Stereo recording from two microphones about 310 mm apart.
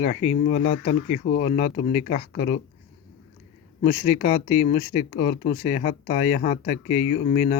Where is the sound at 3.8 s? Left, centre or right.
Left.